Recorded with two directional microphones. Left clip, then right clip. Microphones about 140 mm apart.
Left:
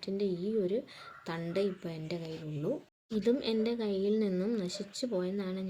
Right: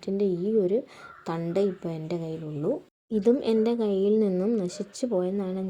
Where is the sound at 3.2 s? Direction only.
15° right (ahead or behind).